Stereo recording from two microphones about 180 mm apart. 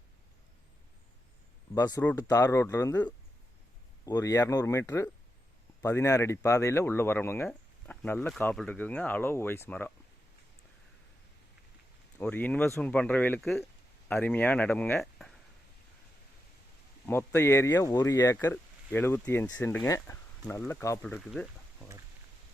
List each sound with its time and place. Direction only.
1.7 s speech: 15° left (ahead or behind)
12.1 s speech: 5° left (ahead or behind)
17.1 s speech: 15° left (ahead or behind)
21.2 s a sound: 5° left (ahead or behind)